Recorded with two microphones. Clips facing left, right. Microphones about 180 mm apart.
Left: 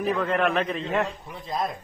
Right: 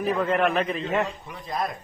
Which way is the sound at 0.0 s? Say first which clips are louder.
Right 1 dB; centre (ahead or behind).